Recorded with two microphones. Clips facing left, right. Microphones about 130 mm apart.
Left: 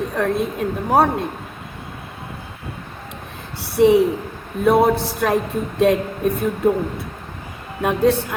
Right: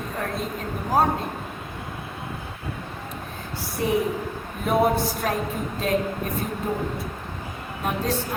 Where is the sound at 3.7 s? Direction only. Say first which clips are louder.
Left 10 dB; 80° left.